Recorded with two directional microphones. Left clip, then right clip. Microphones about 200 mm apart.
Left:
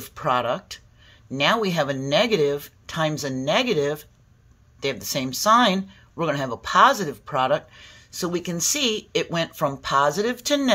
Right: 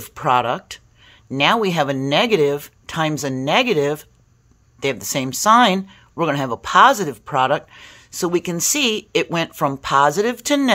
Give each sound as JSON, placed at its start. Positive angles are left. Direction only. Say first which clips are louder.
{"t": 0.0, "sound": "speech", "louder": "right 5 dB", "side_deg": -40}